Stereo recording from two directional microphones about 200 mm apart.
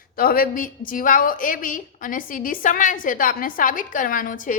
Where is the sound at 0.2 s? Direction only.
45° left (ahead or behind).